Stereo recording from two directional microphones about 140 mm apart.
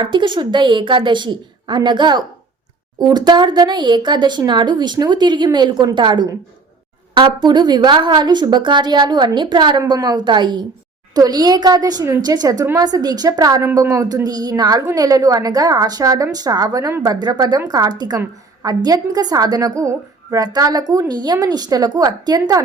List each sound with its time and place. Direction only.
0.0 s speech: 35° right (ahead or behind)
7.4 s a woman's voice: 30° right (ahead or behind)